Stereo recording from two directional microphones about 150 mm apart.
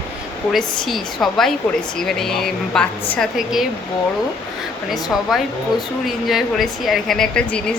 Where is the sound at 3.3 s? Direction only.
5° right (ahead or behind).